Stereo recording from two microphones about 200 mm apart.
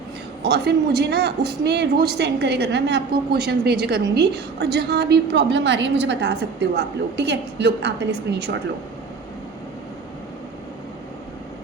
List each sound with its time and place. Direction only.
0.4 s a woman's voice: 55° right (ahead or behind)